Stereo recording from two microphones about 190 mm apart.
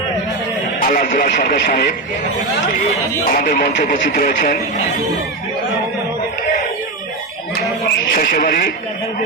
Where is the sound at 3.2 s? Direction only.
45° left (ahead or behind).